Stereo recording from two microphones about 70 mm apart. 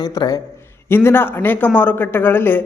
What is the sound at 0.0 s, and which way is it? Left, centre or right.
Speech, left.